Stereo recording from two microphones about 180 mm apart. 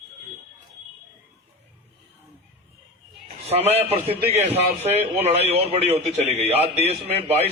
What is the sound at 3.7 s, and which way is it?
A man's voice, 35° right (ahead or behind).